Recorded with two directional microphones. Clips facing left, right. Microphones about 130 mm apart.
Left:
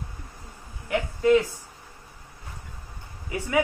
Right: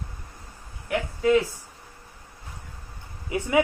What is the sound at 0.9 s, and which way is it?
Speech, centre (ahead or behind).